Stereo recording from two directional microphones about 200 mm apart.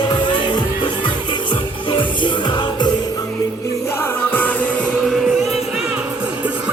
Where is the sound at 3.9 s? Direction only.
10° left (ahead or behind).